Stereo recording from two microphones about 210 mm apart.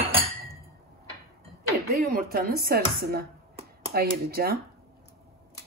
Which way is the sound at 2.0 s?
45° right (ahead or behind).